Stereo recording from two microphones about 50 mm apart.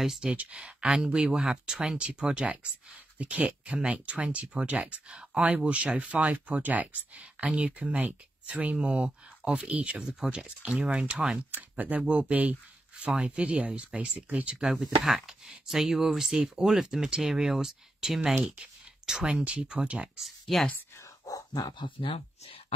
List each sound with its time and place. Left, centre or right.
0.0 s speech: centre
0.3 s speech: right
9.9 s speech: centre
14.6 s speech: centre
18.4 s clicking: centre
19.7 s speech: centre
20.2 s speech: centre